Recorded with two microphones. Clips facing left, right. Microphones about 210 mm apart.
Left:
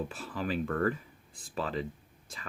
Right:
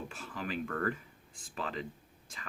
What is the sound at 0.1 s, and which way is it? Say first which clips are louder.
Speech: left 5 dB; 35° left (ahead or behind).